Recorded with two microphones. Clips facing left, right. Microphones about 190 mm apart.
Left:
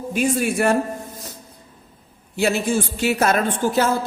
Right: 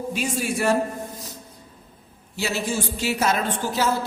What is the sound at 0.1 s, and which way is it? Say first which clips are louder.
Speech: left 8 dB; 55° left (ahead or behind).